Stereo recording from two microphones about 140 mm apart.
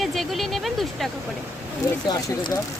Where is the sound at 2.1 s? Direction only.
30° left (ahead or behind).